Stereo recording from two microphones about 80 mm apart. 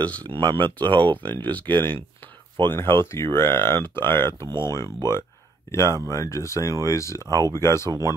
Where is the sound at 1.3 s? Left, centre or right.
Left.